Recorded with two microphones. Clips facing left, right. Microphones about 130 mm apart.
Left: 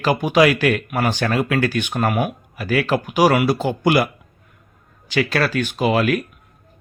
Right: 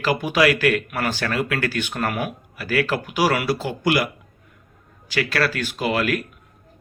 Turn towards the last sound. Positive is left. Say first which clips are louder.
# left 4 dB
turn(degrees=25)  # may be behind; listen again after turning